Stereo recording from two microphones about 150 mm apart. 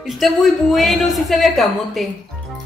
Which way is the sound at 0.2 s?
Centre (ahead or behind).